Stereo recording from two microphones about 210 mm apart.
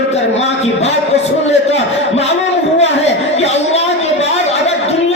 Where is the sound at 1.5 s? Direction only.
30° left (ahead or behind).